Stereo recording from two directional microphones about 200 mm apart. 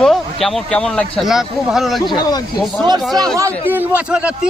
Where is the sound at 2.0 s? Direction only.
20° left (ahead or behind).